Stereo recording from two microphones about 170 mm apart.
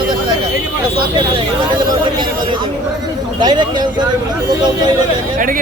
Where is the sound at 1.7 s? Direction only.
25° right (ahead or behind).